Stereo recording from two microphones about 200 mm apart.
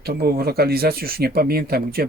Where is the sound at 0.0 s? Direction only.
50° right (ahead or behind).